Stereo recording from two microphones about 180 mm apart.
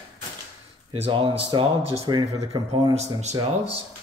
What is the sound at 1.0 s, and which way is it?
Speech, 30° right (ahead or behind).